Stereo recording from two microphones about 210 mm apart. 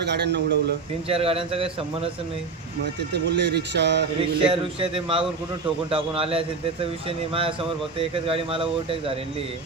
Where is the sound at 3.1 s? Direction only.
55° right (ahead or behind).